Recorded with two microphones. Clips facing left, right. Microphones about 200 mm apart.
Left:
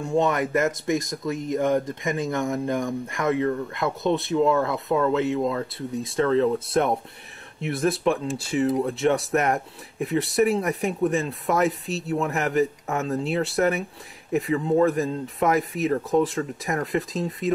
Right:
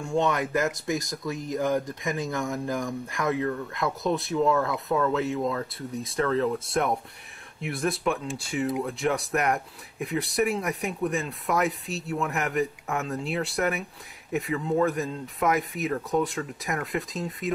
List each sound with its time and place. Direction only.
0.1 s speech: centre (ahead or behind)
7.6 s speech: centre (ahead or behind)
14.9 s speech: centre (ahead or behind)